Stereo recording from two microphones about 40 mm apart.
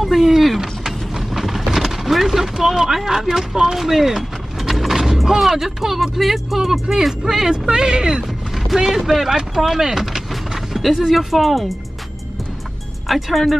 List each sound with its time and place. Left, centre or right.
0.0 s a sound: centre
7.5 s speech: centre
13.1 s speech: centre